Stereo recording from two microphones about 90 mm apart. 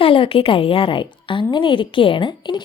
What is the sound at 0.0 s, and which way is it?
A woman's voice, 85° left.